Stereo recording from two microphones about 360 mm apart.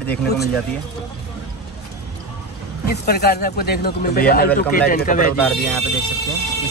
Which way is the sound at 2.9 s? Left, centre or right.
Left.